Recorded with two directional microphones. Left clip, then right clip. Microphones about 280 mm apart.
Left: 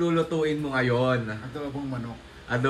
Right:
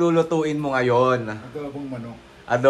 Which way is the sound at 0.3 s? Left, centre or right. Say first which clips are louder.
Right 4 dB; centre.